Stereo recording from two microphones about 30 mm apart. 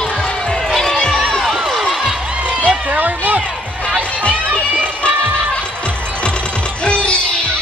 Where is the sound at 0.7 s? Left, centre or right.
Centre.